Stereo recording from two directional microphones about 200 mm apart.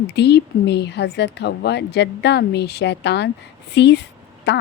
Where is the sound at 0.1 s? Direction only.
55° left (ahead or behind).